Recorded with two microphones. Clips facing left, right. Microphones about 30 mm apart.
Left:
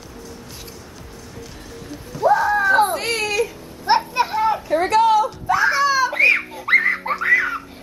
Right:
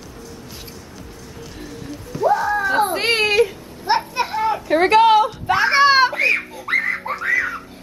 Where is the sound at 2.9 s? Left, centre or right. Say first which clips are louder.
Right 5 dB; right.